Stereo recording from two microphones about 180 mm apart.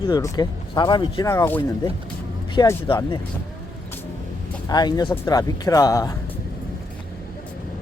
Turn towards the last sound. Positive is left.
turn(degrees=20)  # may be behind; listen again after turning